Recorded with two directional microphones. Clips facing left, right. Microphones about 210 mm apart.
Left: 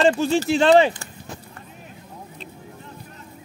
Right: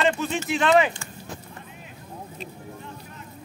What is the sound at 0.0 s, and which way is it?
Speech, 30° left (ahead or behind).